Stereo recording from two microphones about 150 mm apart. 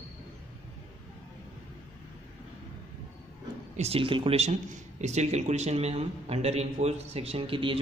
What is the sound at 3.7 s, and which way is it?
Speech, 40° right (ahead or behind).